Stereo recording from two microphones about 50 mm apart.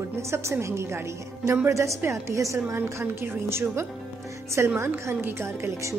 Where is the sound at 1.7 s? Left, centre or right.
Right.